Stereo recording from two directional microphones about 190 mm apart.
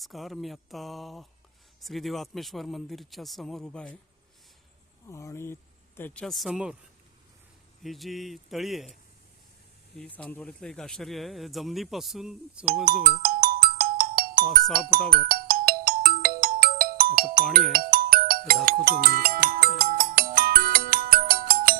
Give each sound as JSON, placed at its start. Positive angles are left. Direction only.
{"t": 0.0, "sound": "speech", "side_deg": 0}
{"t": 5.0, "sound": "speech", "side_deg": 15}
{"t": 7.8, "sound": "speech", "side_deg": 0}
{"t": 10.0, "sound": "speech", "side_deg": 10}
{"t": 12.8, "sound": "music", "side_deg": -50}
{"t": 14.7, "sound": "speech", "side_deg": -50}
{"t": 15.3, "sound": "ringtone", "side_deg": -50}
{"t": 17.7, "sound": "music", "side_deg": -50}